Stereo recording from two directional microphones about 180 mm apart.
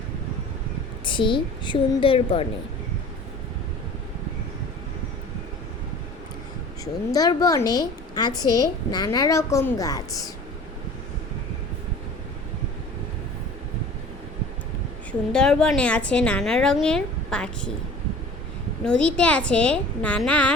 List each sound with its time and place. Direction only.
1.0 s a woman's voice: 25° left (ahead or behind)
6.8 s a woman's voice: 20° left (ahead or behind)
8.4 s a woman's voice: 20° right (ahead or behind)
8.9 s a woman's voice: 20° left (ahead or behind)
15.3 s a woman's voice: 5° left (ahead or behind)
18.9 s a woman's voice: 5° left (ahead or behind)